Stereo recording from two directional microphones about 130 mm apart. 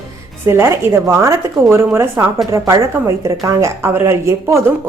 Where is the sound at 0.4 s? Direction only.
20° right (ahead or behind).